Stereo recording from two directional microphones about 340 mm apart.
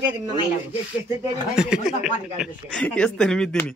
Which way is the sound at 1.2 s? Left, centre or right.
Centre.